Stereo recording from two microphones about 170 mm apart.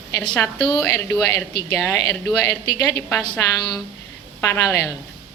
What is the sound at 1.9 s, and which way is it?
A woman's voice, 20° left (ahead or behind).